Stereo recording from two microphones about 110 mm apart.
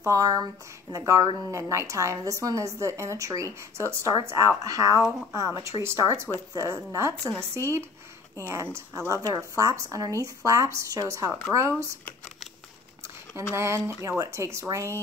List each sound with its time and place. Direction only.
0.0 s a woman's voice: 30° right (ahead or behind)
13.4 s a woman's voice: 25° right (ahead or behind)